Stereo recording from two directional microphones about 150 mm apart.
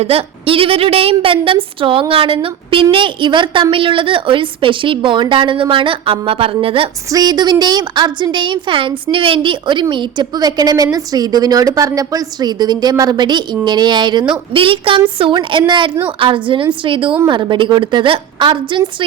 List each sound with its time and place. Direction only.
0.0 s a woman's voice: 40° right (ahead or behind)
7.1 s a woman's voice: 25° right (ahead or behind)